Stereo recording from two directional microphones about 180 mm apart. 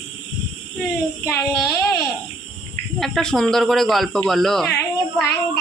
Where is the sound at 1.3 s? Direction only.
15° left (ahead or behind).